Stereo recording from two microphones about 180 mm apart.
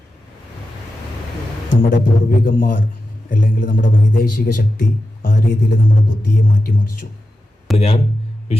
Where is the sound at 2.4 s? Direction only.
50° left (ahead or behind).